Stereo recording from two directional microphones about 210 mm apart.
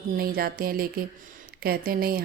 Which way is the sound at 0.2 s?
45° right (ahead or behind).